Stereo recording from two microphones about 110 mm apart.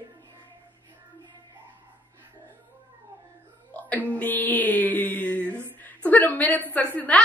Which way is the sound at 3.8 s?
15° left (ahead or behind).